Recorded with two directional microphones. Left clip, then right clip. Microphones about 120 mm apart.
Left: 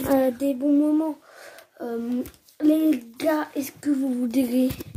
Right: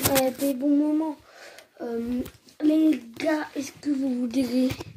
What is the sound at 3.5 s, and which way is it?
A child's voice, 35° left (ahead or behind).